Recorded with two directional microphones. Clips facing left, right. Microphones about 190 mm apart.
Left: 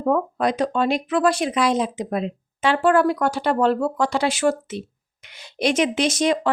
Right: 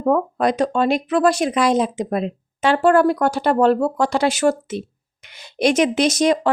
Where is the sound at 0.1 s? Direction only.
45° right (ahead or behind).